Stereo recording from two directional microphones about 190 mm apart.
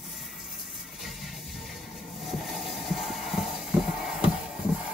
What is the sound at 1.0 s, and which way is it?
Music, centre (ahead or behind).